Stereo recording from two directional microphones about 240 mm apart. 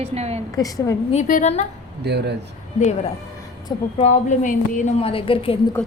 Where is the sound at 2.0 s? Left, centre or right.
Right.